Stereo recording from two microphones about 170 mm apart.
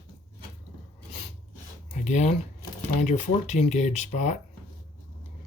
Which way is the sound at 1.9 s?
45° left (ahead or behind).